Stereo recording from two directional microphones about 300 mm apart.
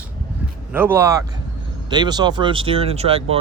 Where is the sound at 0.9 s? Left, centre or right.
Centre.